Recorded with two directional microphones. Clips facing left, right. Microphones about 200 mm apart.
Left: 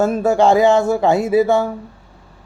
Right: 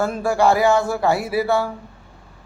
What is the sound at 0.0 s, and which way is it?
Speech, 20° left (ahead or behind).